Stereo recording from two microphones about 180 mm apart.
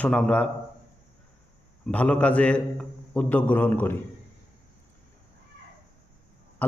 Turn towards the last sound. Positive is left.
turn(degrees=10)  # may be behind; listen again after turning